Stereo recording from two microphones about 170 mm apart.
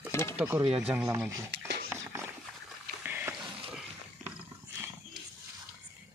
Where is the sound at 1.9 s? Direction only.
15° right (ahead or behind).